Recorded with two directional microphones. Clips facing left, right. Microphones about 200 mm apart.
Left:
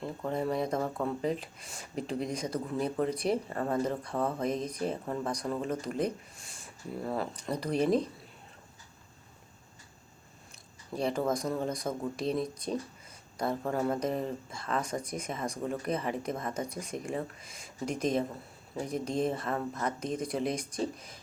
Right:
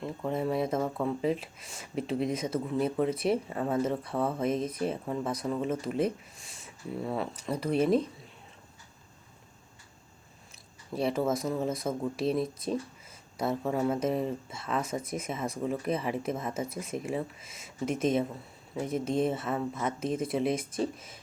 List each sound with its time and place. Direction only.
0.0 s speech: centre (ahead or behind)
10.9 s speech: 5° right (ahead or behind)